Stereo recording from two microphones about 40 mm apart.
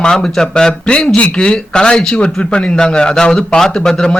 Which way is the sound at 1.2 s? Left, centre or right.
Left.